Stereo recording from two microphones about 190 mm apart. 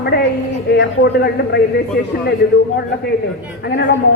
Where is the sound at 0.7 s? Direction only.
60° left (ahead or behind).